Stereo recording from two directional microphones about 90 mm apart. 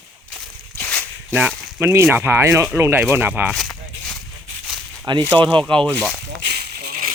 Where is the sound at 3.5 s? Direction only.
Centre (ahead or behind).